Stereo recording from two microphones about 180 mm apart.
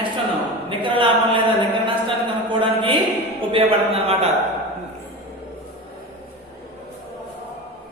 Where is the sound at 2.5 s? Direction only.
30° right (ahead or behind).